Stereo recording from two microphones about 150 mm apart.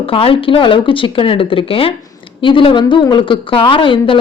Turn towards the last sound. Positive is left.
turn(degrees=35)  # may be behind; listen again after turning